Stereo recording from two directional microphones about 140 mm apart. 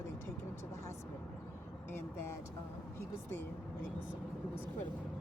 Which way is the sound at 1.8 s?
15° left (ahead or behind).